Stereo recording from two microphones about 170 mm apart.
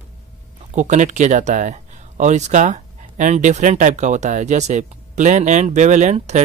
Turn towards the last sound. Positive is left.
turn(degrees=-40)  # may be behind; listen again after turning